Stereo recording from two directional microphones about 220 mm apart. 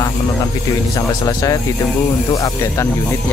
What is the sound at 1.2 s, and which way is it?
Speech, 15° left (ahead or behind).